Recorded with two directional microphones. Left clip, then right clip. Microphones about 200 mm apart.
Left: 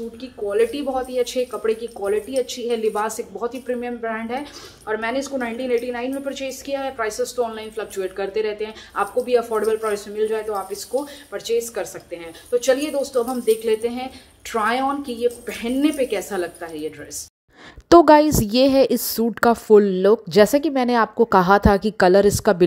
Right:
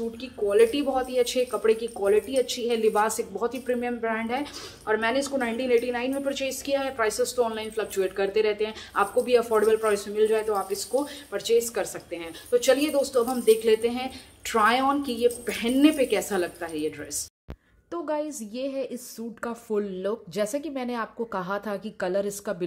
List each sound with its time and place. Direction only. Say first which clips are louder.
0.2 s a woman's voice: even; 5° right (ahead or behind)
17.8 s a woman's voice: left 19 dB; 45° left (ahead or behind)